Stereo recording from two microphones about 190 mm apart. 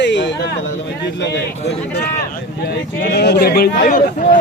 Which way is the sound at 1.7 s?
60° left (ahead or behind).